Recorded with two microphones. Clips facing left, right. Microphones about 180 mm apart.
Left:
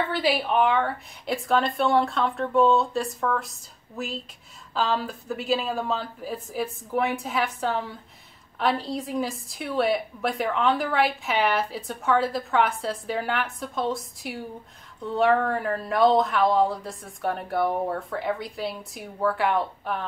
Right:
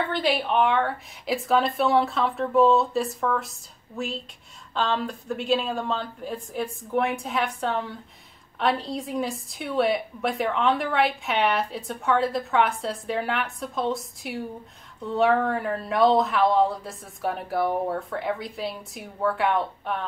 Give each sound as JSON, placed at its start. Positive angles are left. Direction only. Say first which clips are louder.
{"t": 0.1, "sound": "a woman's voice", "louder": "even", "side_deg": 0}